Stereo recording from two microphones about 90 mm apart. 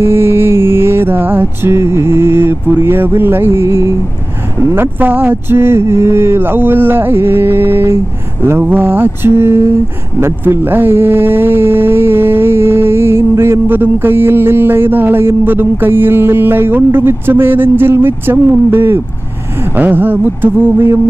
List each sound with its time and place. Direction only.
0.0 s music: 25° right (ahead or behind)
4.6 s speech: 25° right (ahead or behind)